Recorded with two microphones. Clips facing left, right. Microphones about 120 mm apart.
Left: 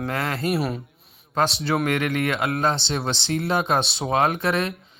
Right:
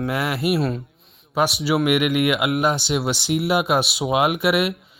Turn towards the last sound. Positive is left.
turn(degrees=-10)  # may be behind; listen again after turning